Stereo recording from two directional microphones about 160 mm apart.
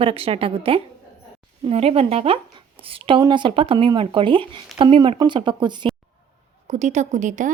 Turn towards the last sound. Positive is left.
turn(degrees=-50)  # may be behind; listen again after turning